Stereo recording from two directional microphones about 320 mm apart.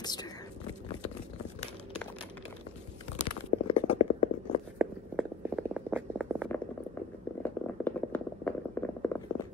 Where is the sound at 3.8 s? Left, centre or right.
Left.